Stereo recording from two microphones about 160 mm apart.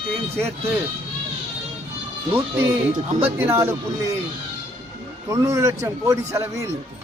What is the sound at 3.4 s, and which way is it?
Speech, 15° right (ahead or behind).